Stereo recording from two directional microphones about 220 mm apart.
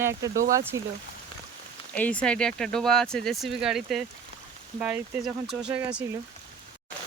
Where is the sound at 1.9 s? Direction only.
5° left (ahead or behind).